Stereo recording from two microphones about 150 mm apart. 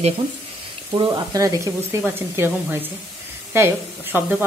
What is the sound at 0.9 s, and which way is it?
Speech, 30° right (ahead or behind).